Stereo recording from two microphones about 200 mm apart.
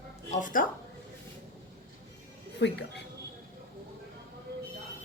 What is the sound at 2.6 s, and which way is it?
Speech, 55° left (ahead or behind).